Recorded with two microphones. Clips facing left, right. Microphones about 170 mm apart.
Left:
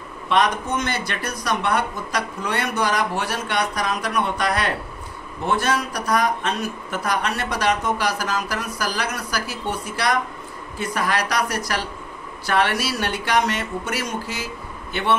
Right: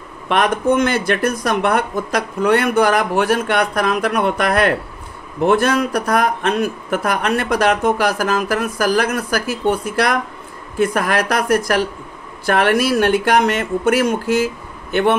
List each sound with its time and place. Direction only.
0.3 s speech: 55° right (ahead or behind)